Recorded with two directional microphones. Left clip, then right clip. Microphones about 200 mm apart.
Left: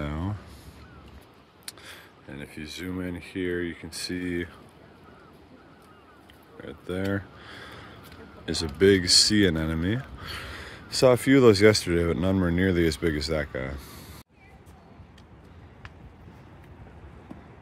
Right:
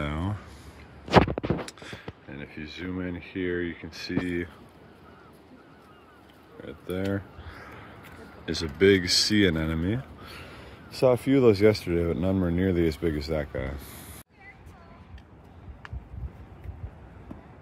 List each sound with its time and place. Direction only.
0.0 s a sound: 5° left (ahead or behind)
1.7 s speech: 10° left (ahead or behind)
6.6 s speech: 10° left (ahead or behind)